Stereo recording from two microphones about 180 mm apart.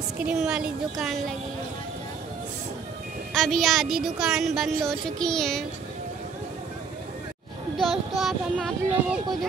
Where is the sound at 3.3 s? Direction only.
Centre (ahead or behind).